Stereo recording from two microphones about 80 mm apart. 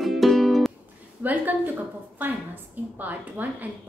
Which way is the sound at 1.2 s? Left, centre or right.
Right.